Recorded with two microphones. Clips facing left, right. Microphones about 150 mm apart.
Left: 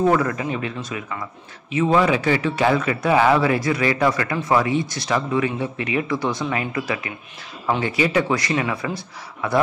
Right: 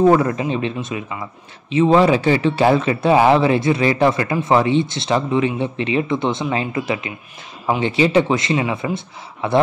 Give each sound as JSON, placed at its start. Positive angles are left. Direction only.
{"t": 0.1, "sound": "speech", "side_deg": -25}